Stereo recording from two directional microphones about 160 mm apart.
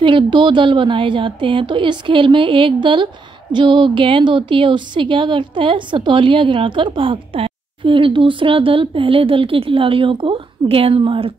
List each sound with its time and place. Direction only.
0.0 s a woman's voice: 30° right (ahead or behind)